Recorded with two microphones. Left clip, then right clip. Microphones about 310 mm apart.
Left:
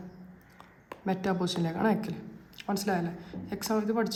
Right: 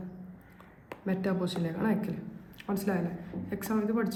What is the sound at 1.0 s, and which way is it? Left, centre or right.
A woman's voice, centre.